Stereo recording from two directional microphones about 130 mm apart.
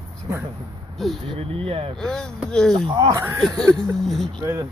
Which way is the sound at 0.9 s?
Centre (ahead or behind).